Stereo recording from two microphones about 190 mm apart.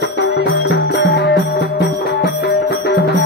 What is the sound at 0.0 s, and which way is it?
Music, 65° left (ahead or behind).